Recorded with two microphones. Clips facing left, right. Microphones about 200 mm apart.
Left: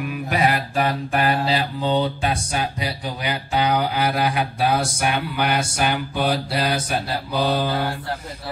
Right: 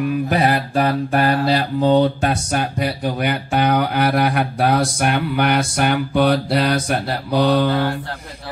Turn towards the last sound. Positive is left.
turn(degrees=-70)  # may be behind; listen again after turning